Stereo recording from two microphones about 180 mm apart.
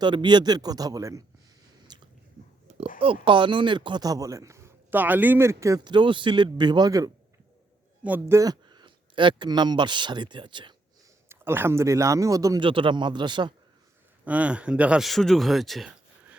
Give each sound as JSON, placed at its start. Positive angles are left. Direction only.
{"t": 0.0, "sound": "a man's voice", "side_deg": -25}
{"t": 1.9, "sound": "squish", "side_deg": -25}
{"t": 3.0, "sound": "a man's voice", "side_deg": -30}
{"t": 11.3, "sound": "a man's voice", "side_deg": -10}
{"t": 14.3, "sound": "speech", "side_deg": -5}